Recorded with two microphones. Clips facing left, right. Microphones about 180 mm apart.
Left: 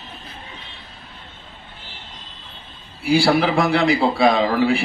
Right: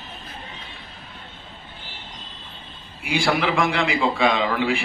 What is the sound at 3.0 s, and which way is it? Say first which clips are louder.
A man's voice: left 6 dB; 35° left (ahead or behind).